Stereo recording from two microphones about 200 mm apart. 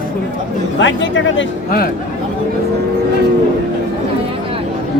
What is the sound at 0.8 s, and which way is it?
Speech, 65° left (ahead or behind).